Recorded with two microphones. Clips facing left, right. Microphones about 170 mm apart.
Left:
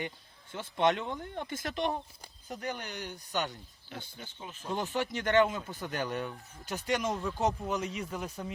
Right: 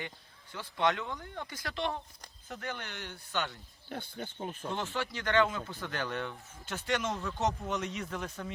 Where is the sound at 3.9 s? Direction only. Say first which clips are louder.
Right 5 dB; 55° right (ahead or behind).